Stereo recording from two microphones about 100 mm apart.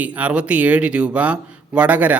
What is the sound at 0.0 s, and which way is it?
Speech, 15° right (ahead or behind).